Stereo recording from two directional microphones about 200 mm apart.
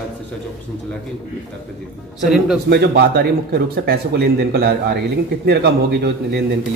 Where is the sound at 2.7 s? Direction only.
55° right (ahead or behind).